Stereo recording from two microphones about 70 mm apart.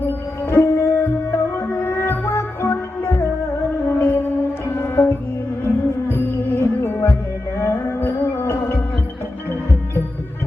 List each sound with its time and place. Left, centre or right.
0.1 s music: left